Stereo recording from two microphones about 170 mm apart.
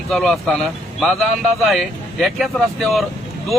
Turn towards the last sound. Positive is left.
turn(degrees=0)  # may be behind; listen again after turning